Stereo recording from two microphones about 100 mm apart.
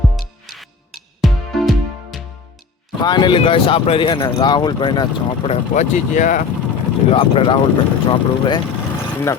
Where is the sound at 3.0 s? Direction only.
50° left (ahead or behind).